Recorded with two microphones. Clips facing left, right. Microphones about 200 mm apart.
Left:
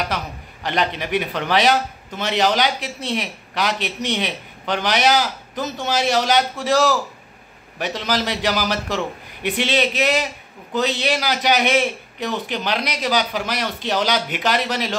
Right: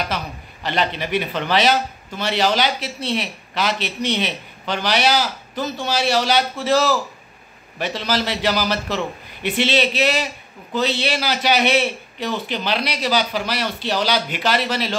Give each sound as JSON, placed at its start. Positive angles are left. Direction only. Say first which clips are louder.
{"t": 0.7, "sound": "speech", "louder": "even", "side_deg": 15}